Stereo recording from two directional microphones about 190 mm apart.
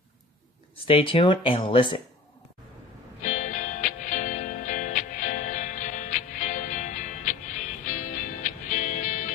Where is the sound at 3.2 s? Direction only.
40° left (ahead or behind).